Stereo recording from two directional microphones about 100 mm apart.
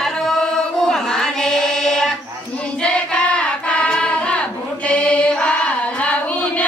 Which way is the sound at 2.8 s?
10° left (ahead or behind).